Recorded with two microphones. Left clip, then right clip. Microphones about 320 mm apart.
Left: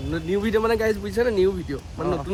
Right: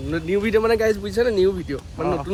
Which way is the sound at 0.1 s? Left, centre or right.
Centre.